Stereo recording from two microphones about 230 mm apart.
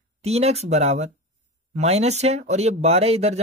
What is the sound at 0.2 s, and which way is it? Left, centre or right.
Speech, right.